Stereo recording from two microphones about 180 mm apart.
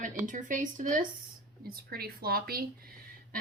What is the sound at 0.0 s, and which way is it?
Speech, 45° right (ahead or behind).